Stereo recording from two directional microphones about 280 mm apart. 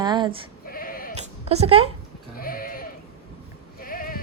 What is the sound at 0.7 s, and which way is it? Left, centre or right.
Sheep, left.